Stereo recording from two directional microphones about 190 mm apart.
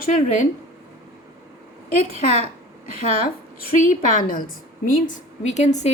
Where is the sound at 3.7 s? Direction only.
40° left (ahead or behind).